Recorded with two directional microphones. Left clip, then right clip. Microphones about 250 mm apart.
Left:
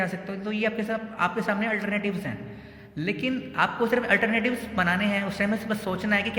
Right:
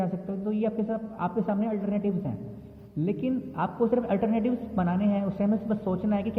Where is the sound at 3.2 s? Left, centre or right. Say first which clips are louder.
Left 5 dB; left.